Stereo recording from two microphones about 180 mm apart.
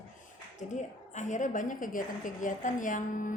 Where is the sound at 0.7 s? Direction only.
40° left (ahead or behind).